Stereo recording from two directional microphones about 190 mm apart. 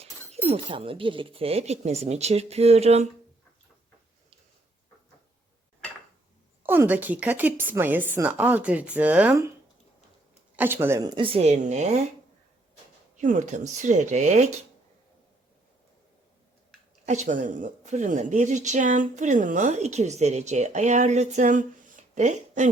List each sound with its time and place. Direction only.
0.4 s speech: 30° right (ahead or behind)
6.6 s a woman's voice: 10° right (ahead or behind)
10.6 s speech: 10° right (ahead or behind); by 11.9 s 35° right (ahead or behind)
13.1 s speech: 40° right (ahead or behind)
17.1 s speech: 40° right (ahead or behind)